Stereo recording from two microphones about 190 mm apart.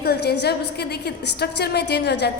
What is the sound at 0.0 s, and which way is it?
A woman's voice, 60° left (ahead or behind).